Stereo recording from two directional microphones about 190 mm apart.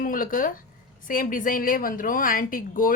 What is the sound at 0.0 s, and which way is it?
A woman's voice, 45° left (ahead or behind).